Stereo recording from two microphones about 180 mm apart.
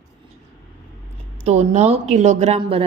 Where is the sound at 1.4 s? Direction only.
35° right (ahead or behind).